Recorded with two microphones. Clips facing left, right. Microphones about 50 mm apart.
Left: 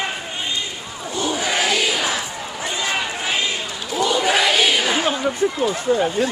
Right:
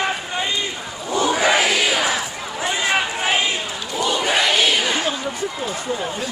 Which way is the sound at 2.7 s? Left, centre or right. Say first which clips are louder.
Right 3 dB; right.